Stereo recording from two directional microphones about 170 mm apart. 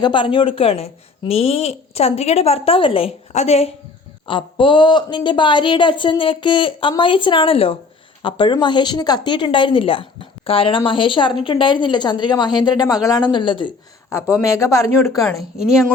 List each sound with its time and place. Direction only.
0.0 s a woman's voice: 30° left (ahead or behind)
4.3 s a woman's voice: 30° left (ahead or behind)
14.1 s speech: 15° left (ahead or behind)
15.6 s a woman's voice: centre (ahead or behind)